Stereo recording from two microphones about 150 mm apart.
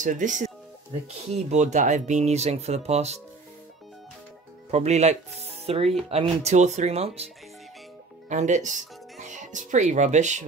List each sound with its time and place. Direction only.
0.0 s speech: 55° right (ahead or behind)
4.6 s speech: 50° right (ahead or behind)
8.3 s speech: 55° right (ahead or behind)